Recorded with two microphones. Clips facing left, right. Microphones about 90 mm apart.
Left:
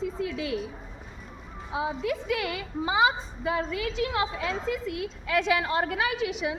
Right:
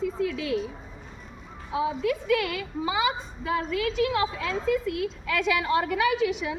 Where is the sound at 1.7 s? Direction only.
25° left (ahead or behind).